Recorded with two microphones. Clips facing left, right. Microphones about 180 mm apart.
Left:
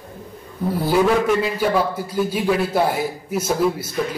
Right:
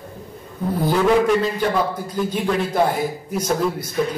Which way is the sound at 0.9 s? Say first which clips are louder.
Even; 10° left (ahead or behind).